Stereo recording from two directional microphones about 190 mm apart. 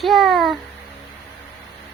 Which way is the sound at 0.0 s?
Centre (ahead or behind).